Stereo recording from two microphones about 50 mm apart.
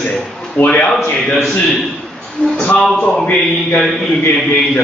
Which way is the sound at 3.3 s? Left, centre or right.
Centre.